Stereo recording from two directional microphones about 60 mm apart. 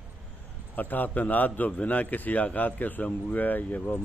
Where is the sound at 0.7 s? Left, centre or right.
Left.